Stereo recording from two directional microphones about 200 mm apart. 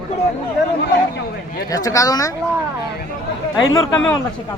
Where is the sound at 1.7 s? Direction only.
15° left (ahead or behind).